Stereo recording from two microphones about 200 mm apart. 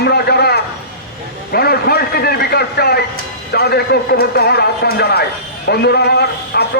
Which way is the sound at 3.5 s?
55° left (ahead or behind).